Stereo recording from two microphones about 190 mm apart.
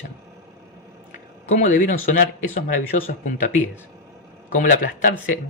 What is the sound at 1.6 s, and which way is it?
Speech, 40° left (ahead or behind).